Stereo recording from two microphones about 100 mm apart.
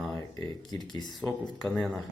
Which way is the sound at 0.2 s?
35° left (ahead or behind).